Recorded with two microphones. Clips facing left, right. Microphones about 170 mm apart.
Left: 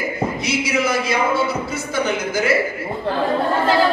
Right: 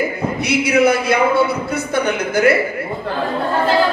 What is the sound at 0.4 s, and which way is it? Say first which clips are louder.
A man's voice: right 9 dB; 60° right (ahead or behind).